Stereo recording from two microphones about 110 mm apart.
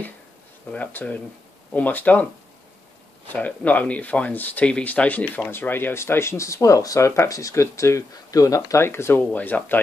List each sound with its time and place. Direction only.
0.7 s speech: 10° left (ahead or behind)
3.3 s speech: 15° left (ahead or behind)